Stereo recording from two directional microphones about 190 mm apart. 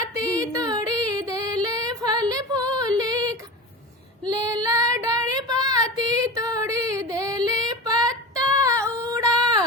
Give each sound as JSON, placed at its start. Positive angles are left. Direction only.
{"t": 0.1, "sound": "female singing", "side_deg": -15}
{"t": 4.2, "sound": "child singing", "side_deg": -20}